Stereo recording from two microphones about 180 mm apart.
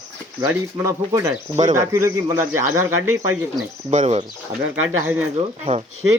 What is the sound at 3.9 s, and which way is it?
Speech, 40° right (ahead or behind).